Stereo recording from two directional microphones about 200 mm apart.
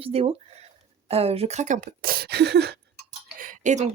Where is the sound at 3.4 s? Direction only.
40° right (ahead or behind).